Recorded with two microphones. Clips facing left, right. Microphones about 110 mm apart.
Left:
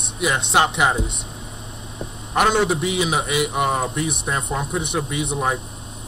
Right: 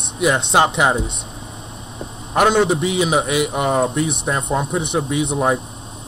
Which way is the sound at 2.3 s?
40° right (ahead or behind).